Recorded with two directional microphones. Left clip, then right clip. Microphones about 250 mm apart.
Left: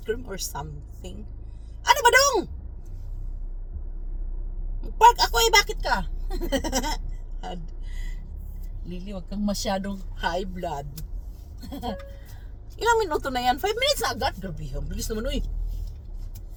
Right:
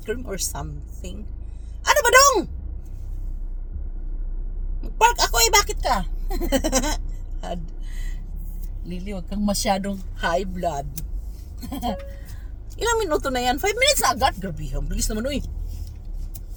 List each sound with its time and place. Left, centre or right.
0.0 s speech: centre
1.8 s speech: centre
4.8 s speech: centre
8.9 s speech: right